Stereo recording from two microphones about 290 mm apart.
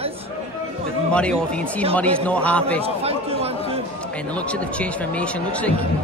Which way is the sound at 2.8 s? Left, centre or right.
Centre.